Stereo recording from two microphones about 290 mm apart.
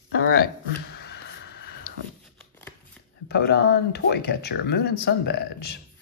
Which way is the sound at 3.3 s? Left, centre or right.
Left.